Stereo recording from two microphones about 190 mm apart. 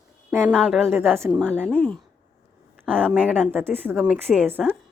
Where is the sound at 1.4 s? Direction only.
5° left (ahead or behind).